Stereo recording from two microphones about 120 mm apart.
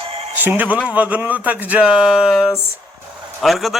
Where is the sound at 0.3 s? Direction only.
15° right (ahead or behind).